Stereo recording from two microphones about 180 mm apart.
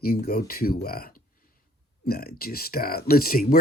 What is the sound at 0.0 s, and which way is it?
Speech, 60° left (ahead or behind).